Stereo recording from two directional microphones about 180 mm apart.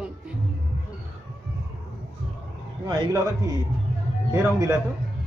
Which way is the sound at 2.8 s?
25° right (ahead or behind).